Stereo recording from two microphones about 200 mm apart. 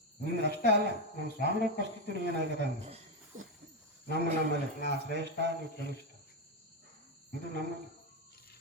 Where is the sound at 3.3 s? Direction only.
40° right (ahead or behind).